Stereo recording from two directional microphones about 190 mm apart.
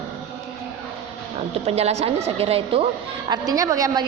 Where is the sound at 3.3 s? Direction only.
20° right (ahead or behind).